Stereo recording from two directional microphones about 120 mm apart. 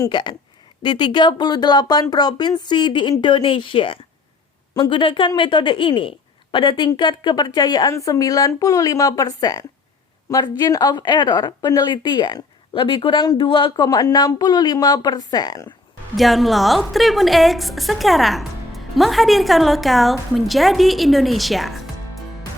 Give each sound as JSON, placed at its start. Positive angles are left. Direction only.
{"t": 0.1, "sound": "a woman's voice", "side_deg": 40}
{"t": 13.8, "sound": "a woman's voice", "side_deg": 35}
{"t": 16.1, "sound": "a woman's voice", "side_deg": 0}